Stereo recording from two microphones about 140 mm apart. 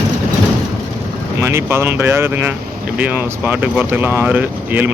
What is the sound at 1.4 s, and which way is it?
Speech, 20° right (ahead or behind).